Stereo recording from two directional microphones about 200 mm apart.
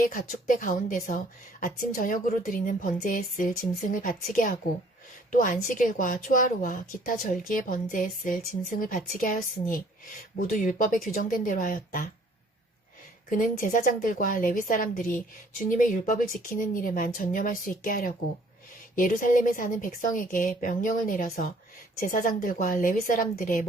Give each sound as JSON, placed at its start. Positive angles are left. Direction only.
{"t": 0.0, "sound": "a woman's voice", "side_deg": 45}
{"t": 13.6, "sound": "a woman's voice", "side_deg": 45}